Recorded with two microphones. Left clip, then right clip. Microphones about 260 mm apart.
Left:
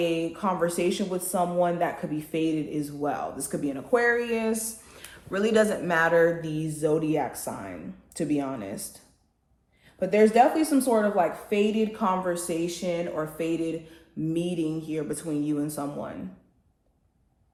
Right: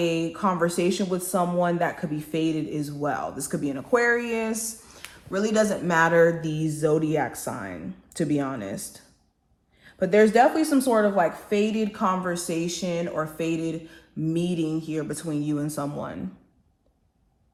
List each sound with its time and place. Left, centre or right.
0.0 s speech: right
4.9 s speech: centre; by 8.9 s right
10.0 s speech: right